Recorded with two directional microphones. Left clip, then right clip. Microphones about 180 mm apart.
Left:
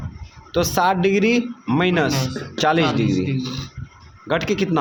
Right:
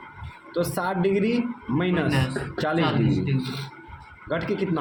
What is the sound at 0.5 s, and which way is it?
Speech, 40° left (ahead or behind).